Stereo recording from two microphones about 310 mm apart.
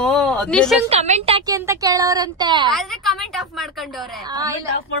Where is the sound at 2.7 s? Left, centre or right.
Centre.